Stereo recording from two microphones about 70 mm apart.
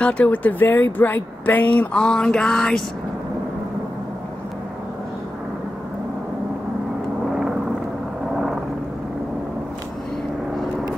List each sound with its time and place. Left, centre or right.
0.0 s speech: left; by 2.8 s centre